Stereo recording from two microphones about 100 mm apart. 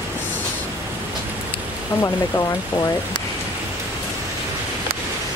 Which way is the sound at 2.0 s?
30° left (ahead or behind).